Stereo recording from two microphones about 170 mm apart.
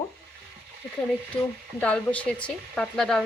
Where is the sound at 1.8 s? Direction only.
10° left (ahead or behind).